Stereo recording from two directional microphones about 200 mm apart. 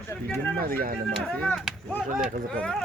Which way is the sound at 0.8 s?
45° right (ahead or behind).